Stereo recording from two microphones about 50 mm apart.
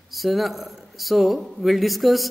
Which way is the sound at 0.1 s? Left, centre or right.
Centre.